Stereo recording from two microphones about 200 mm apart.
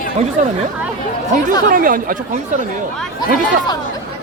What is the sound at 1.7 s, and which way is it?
Speech, 45° right (ahead or behind).